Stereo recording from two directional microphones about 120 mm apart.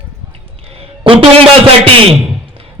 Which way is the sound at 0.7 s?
55° right (ahead or behind).